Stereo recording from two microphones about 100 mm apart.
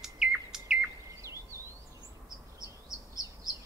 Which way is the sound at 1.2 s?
30° right (ahead or behind).